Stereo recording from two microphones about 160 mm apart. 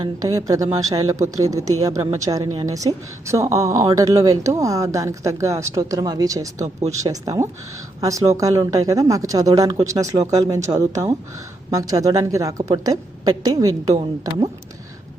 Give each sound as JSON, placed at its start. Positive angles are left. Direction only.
{"t": 0.2, "sound": "speech", "side_deg": -20}
{"t": 13.9, "sound": "speech", "side_deg": -40}